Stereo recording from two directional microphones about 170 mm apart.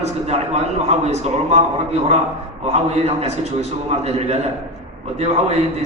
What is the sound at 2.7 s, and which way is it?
Speech, 40° right (ahead or behind).